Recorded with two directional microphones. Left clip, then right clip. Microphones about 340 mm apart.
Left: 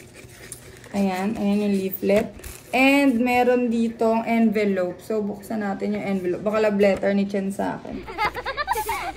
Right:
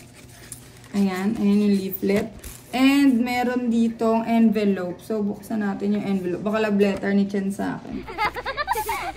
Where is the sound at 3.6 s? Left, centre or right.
Centre.